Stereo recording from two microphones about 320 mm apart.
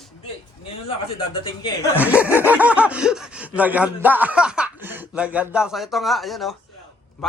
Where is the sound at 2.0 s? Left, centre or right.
Centre.